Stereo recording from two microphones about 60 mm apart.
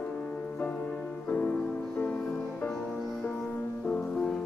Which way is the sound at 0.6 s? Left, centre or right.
Left.